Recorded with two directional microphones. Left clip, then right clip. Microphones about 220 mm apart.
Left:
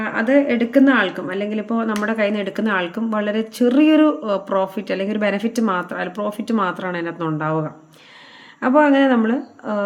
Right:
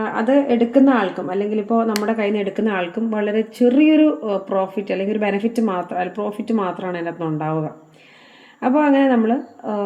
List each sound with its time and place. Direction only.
0.3 s speech: 5° left (ahead or behind)
8.6 s speech: 15° left (ahead or behind)